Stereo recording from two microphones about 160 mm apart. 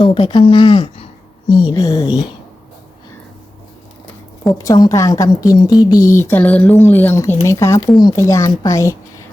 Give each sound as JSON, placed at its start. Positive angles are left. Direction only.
{"t": 0.0, "sound": "speech", "side_deg": 30}
{"t": 1.7, "sound": "a woman's voice", "side_deg": 20}
{"t": 4.5, "sound": "a woman's voice", "side_deg": 20}